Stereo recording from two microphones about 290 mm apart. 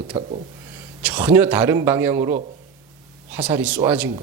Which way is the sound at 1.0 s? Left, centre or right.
Centre.